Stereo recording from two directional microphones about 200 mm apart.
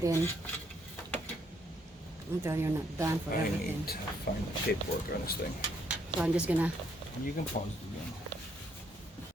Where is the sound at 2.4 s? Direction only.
15° right (ahead or behind).